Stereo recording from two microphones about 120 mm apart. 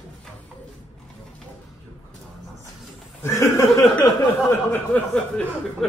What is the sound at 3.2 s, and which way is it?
Chuckle, 25° left (ahead or behind).